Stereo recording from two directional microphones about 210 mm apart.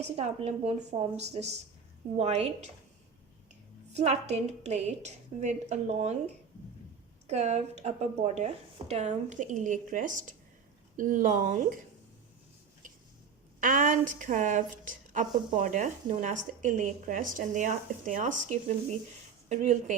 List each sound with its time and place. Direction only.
0.0 s a woman's voice: 30° right (ahead or behind)
3.9 s a woman's voice: 30° right (ahead or behind)
7.3 s a woman's voice: 30° right (ahead or behind)
13.6 s a woman's voice: 40° right (ahead or behind)